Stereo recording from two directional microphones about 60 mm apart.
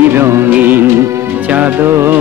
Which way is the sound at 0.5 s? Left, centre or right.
Right.